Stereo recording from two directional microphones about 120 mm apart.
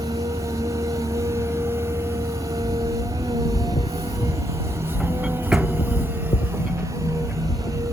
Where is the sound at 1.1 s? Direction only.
25° right (ahead or behind).